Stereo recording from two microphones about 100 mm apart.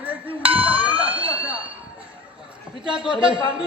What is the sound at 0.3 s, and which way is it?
Music, 65° right (ahead or behind).